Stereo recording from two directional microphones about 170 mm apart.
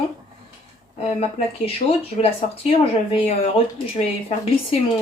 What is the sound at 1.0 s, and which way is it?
Speech, 35° left (ahead or behind).